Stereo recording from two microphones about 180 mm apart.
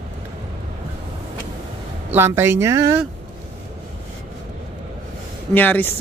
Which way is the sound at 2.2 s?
15° right (ahead or behind).